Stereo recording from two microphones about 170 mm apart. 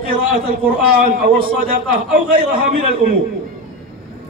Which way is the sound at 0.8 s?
60° right (ahead or behind).